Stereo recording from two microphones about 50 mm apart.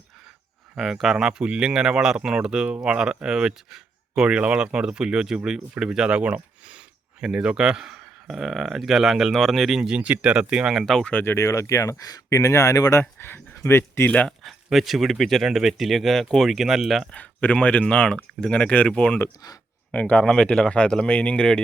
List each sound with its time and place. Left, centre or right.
0.8 s speech: centre
9.8 s speech: right
11.1 s speech: left
11.3 s speech: left
13.0 s speech: left
14.4 s speech: centre
17.1 s speech: left
20.3 s speech: centre